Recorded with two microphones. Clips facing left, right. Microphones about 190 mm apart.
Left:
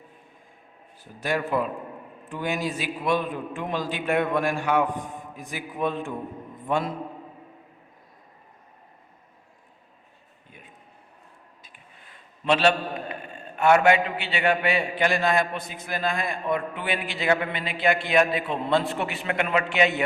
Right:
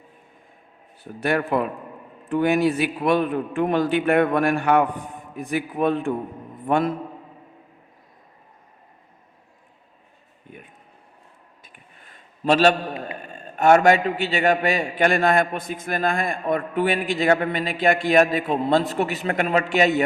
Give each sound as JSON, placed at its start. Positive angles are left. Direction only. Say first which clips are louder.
{"t": 1.2, "sound": "a man's voice", "louder": "right 4 dB", "side_deg": -60}
{"t": 12.5, "sound": "a man's voice", "louder": "right 4 dB", "side_deg": -40}